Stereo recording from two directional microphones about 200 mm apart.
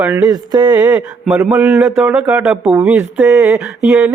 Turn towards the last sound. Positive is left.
turn(degrees=-5)  # may be behind; listen again after turning